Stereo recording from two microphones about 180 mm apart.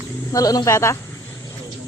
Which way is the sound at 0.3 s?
20° left (ahead or behind).